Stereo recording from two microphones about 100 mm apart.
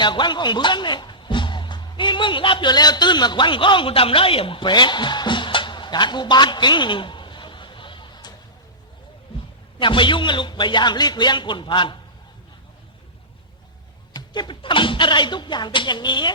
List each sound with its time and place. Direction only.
0.0 s a man's voice: 50° left (ahead or behind)
9.7 s a man's voice: 55° left (ahead or behind)
14.1 s a man's voice: 45° left (ahead or behind)